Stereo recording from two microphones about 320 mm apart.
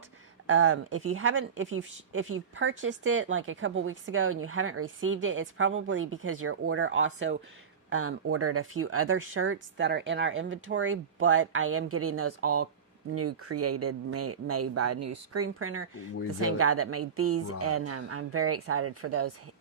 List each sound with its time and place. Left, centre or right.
0.4 s speech: right